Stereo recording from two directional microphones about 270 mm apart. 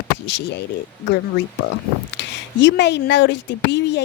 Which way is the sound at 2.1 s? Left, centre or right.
Left.